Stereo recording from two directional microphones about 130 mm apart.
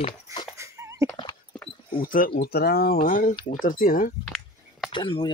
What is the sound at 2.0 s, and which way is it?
Speech, 90° left.